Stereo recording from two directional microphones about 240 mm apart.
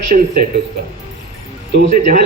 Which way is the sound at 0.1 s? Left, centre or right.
Right.